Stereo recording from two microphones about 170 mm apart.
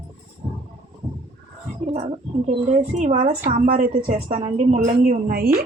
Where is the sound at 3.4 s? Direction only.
55° right (ahead or behind).